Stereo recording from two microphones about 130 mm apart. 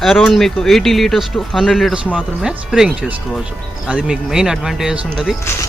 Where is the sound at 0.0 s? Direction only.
Centre (ahead or behind).